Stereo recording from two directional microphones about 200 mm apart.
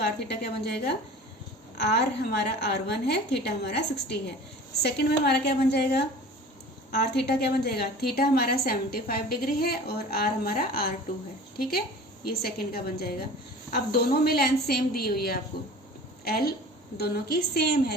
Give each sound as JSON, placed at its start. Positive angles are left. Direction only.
{"t": 0.0, "sound": "a woman's voice", "side_deg": 55}
{"t": 12.2, "sound": "a woman's voice", "side_deg": 50}
{"t": 17.0, "sound": "a woman's voice", "side_deg": 50}